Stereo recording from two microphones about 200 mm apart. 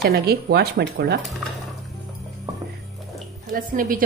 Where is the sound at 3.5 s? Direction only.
45° right (ahead or behind).